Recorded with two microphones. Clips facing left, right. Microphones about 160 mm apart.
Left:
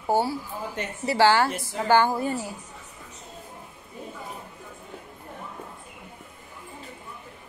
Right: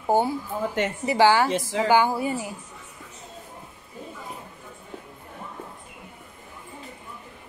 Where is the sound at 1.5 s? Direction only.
90° right.